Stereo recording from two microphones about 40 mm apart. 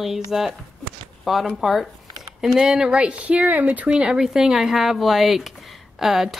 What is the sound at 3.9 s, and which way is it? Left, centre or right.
Speech, right.